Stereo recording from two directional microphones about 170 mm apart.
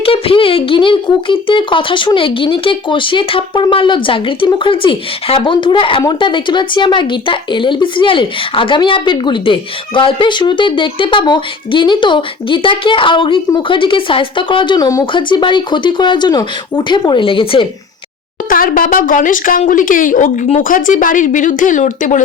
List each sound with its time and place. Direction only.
0.0 s speech: 35° left (ahead or behind)
18.4 s speech: 55° left (ahead or behind)